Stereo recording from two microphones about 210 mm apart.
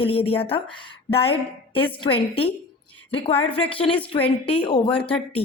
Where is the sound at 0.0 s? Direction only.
25° left (ahead or behind).